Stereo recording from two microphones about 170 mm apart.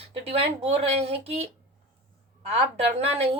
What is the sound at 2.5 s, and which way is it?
Speech, 35° right (ahead or behind).